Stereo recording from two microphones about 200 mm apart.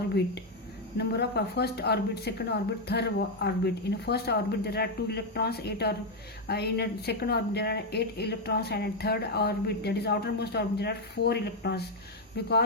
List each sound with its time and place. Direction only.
0.9 s speech: 55° left (ahead or behind)